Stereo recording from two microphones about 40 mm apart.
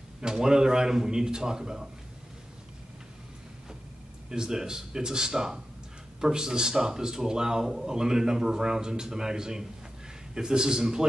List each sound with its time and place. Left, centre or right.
0.2 s speech: centre
4.3 s speech: centre